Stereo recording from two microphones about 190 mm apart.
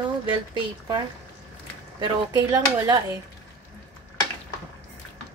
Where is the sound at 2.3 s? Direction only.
20° right (ahead or behind).